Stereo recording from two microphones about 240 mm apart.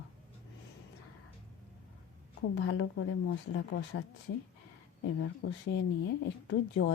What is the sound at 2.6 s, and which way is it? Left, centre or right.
Speech, left.